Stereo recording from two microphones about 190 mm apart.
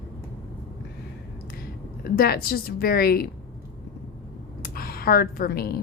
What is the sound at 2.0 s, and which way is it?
A woman's voice, 50° left (ahead or behind).